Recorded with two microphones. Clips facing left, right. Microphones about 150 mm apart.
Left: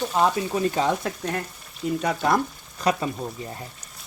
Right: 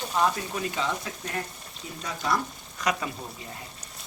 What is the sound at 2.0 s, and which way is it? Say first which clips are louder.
Speech: left 5 dB; 60° left (ahead or behind).